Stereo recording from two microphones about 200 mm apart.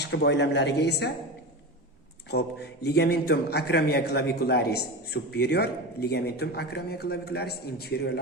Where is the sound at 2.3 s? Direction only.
55° left (ahead or behind).